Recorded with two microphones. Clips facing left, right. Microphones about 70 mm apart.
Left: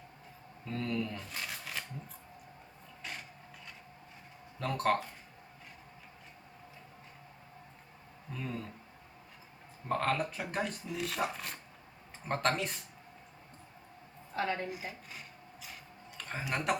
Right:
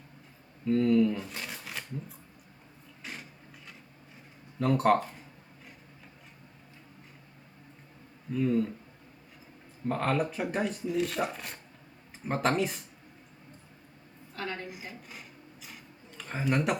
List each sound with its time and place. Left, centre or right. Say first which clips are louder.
0.7 s speech: right 12 dB; centre
3.0 s mechanisms: right 1 dB; centre
4.6 s speech: right 7 dB; centre
8.3 s speech: right 13 dB; centre
9.9 s speech: right 3 dB; centre
14.3 s a woman's voice: left 3 dB; left
14.7 s speech: left 1 dB; centre
15.6 s a sound: left 1 dB; centre